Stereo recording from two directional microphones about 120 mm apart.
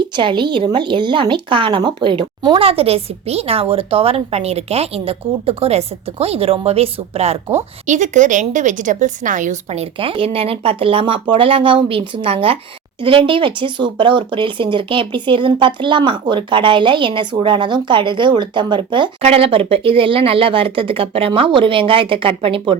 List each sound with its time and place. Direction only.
0.2 s a woman's voice: 40° right (ahead or behind); by 7.3 s 60° right (ahead or behind)
7.9 s a woman's voice: 90° right
10.0 s speech: 50° right (ahead or behind)
19.2 s speech: 55° right (ahead or behind)